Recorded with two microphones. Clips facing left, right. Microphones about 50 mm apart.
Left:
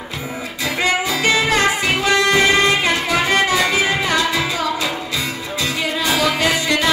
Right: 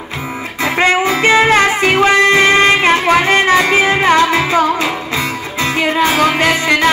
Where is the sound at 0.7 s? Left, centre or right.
Right.